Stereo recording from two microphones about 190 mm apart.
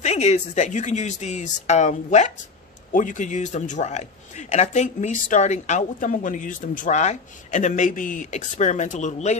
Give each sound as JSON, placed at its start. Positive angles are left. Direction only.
{"t": 0.0, "sound": "speech", "side_deg": 35}